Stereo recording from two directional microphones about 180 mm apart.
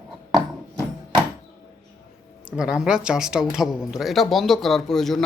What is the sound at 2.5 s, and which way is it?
Speech, 5° right (ahead or behind).